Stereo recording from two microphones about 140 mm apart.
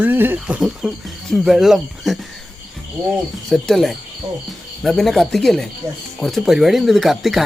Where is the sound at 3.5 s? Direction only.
Centre (ahead or behind).